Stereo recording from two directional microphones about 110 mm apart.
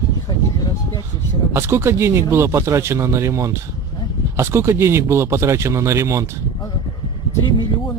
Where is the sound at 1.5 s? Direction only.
25° right (ahead or behind).